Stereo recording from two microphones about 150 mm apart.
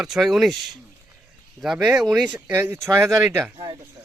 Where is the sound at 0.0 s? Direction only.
Centre (ahead or behind).